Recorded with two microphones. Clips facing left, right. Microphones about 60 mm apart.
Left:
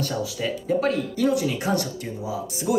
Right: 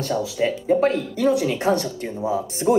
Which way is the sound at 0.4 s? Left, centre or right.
Right.